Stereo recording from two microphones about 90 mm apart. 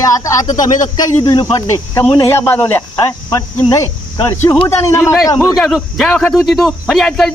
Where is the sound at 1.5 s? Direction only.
35° left (ahead or behind).